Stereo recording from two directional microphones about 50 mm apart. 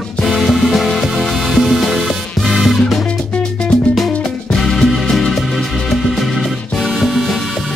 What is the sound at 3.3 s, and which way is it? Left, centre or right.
Music, centre.